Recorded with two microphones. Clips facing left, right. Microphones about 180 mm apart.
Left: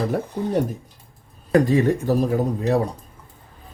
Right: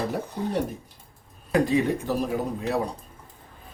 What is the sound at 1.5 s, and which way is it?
Speech, 45° left (ahead or behind).